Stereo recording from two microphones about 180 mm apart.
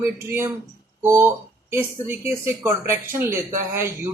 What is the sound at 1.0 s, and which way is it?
Speech, 15° right (ahead or behind).